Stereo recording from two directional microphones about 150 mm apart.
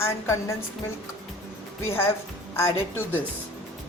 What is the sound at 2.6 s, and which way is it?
Speech, 15° left (ahead or behind).